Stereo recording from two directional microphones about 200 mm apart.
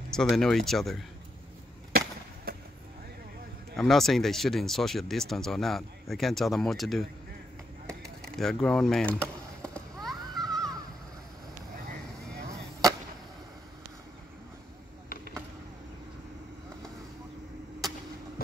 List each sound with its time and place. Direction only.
0.1 s speech: 5° left (ahead or behind)
1.9 s skateboard: 50° right (ahead or behind)
3.7 s speech: centre (ahead or behind)
7.8 s chop: 5° left (ahead or behind)